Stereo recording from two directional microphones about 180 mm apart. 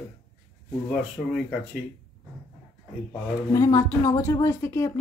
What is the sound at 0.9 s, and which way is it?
Speech, centre (ahead or behind).